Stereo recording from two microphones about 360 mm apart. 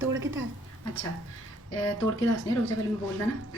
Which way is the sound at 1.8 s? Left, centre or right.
Right.